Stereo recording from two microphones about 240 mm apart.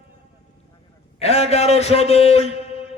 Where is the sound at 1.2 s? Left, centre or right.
Left.